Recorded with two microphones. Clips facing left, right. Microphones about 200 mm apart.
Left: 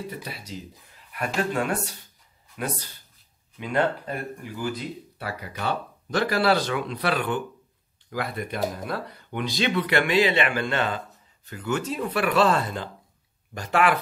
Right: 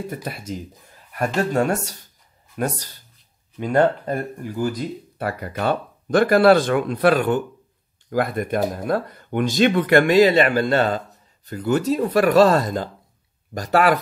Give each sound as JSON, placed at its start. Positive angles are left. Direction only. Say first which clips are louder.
{"t": 0.1, "sound": "speech", "louder": "right 6 dB", "side_deg": -50}